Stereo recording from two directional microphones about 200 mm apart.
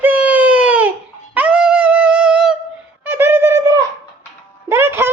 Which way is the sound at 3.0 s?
10° right (ahead or behind).